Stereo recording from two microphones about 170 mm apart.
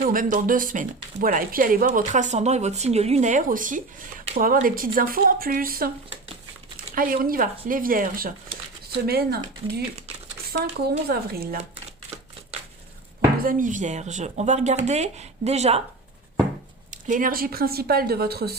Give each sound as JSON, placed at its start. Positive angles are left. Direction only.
{"t": 0.0, "sound": "speech", "side_deg": -55}
{"t": 13.4, "sound": "speech", "side_deg": -50}
{"t": 17.1, "sound": "speech", "side_deg": -55}